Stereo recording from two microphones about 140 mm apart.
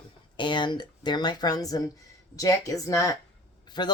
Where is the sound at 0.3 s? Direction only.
35° left (ahead or behind).